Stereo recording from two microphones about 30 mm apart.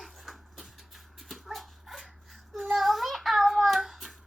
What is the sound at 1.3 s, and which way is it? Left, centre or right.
Dog, centre.